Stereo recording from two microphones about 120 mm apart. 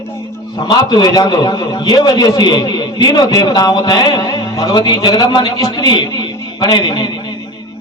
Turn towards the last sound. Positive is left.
turn(degrees=35)  # may be behind; listen again after turning